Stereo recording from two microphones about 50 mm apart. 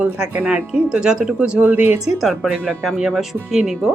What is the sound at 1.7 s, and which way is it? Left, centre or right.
Speech, right.